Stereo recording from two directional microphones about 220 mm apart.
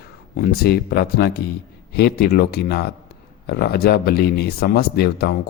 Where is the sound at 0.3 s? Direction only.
45° left (ahead or behind).